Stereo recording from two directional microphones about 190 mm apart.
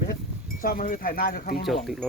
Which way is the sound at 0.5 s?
50° left (ahead or behind).